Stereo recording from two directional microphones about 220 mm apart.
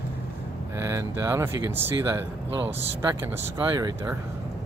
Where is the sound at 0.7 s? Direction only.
15° right (ahead or behind).